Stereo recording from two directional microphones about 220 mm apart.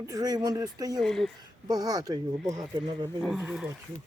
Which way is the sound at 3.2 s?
5° right (ahead or behind).